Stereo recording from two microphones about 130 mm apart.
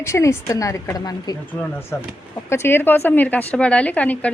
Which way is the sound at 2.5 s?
20° left (ahead or behind).